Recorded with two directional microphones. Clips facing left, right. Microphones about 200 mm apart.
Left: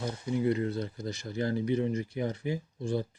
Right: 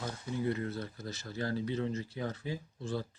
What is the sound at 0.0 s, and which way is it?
Speech, 15° left (ahead or behind).